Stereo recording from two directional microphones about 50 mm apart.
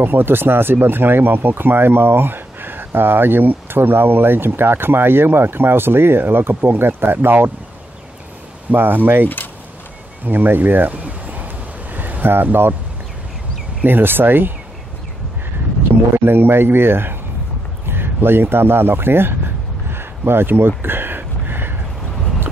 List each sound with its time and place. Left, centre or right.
0.0 s speech: right
8.7 s speech: right
10.2 s a sound: right
13.8 s speech: right
16.3 s speech: right
17.8 s a sound: right